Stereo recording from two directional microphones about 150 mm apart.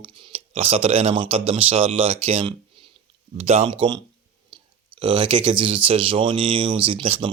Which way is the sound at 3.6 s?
30° right (ahead or behind).